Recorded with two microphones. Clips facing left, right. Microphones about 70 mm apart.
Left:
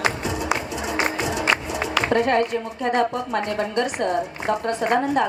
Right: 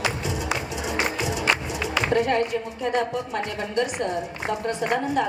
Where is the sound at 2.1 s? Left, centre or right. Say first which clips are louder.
Left 2 dB; left.